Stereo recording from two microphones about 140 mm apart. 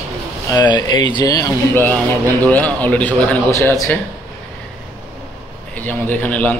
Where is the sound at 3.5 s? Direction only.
20° left (ahead or behind).